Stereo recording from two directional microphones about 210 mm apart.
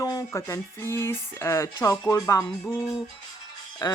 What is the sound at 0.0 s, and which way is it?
Speech, 15° left (ahead or behind).